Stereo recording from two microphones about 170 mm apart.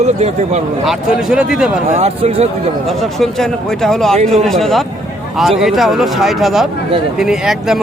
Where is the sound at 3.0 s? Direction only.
Centre (ahead or behind).